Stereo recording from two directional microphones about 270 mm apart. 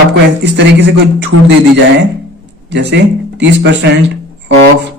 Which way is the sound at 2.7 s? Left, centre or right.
Right.